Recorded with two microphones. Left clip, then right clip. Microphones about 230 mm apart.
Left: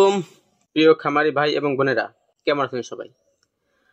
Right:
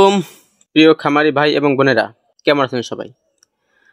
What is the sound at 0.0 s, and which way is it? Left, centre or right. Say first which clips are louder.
Speech: right 5 dB; right.